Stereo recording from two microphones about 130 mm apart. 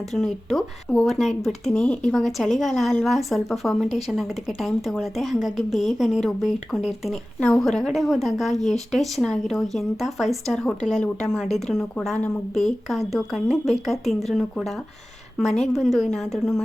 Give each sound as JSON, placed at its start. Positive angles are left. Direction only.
{"t": 0.1, "sound": "speech", "side_deg": 0}